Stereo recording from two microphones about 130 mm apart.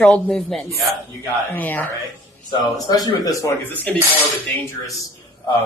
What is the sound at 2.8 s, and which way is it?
Speech, 30° left (ahead or behind).